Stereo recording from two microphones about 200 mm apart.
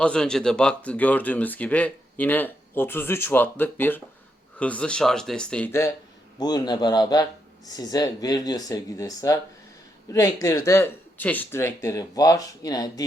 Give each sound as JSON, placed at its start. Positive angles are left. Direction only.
{"t": 0.0, "sound": "a man's voice", "side_deg": 5}